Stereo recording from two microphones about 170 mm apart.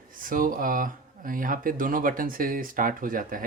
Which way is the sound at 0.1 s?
55° right (ahead or behind).